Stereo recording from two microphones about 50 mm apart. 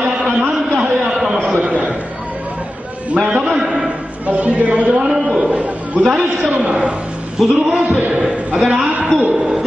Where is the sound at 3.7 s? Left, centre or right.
Right.